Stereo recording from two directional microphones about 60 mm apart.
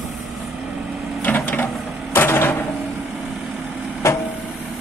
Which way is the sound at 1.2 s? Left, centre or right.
Left.